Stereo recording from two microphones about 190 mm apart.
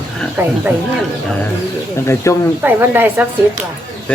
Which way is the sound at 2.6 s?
10° right (ahead or behind).